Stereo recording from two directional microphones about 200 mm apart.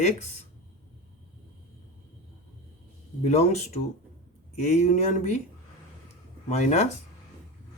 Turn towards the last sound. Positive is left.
turn(degrees=35)  # may be behind; listen again after turning